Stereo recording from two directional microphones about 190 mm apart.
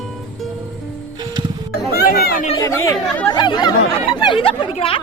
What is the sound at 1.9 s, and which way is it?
Children playing, 50° left (ahead or behind).